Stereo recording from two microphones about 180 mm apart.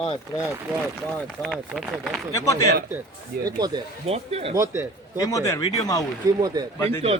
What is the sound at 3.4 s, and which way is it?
Speech, 20° right (ahead or behind).